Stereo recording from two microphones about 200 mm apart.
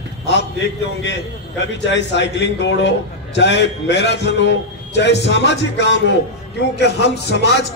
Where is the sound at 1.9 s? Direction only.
60° left (ahead or behind).